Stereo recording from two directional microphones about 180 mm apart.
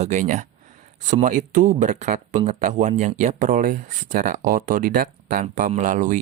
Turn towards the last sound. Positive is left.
turn(degrees=-45)  # may be behind; listen again after turning